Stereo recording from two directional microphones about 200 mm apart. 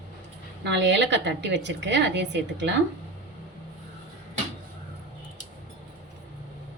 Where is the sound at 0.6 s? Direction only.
60° right (ahead or behind).